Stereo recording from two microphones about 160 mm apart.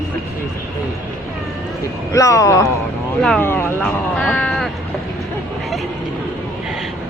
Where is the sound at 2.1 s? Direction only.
20° left (ahead or behind); by 4.7 s centre (ahead or behind).